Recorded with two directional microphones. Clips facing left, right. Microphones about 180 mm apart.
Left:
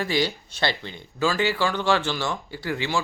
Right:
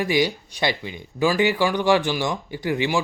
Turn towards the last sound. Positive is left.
turn(degrees=-15)  # may be behind; listen again after turning